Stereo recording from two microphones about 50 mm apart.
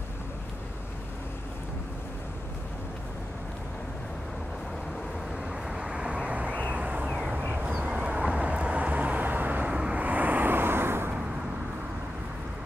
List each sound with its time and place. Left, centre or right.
5.5 s vehicle: centre
7.1 s vehicle: centre; by 9.7 s right
9.7 s vehicle: centre
9.9 s vehicle: right